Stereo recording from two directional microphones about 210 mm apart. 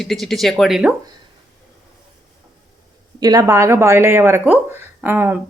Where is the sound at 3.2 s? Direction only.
20° right (ahead or behind).